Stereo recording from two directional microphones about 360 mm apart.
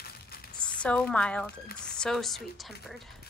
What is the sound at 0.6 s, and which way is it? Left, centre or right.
A woman's voice, centre.